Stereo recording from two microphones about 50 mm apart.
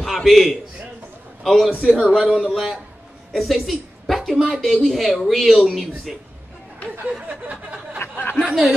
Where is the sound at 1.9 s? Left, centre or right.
Centre.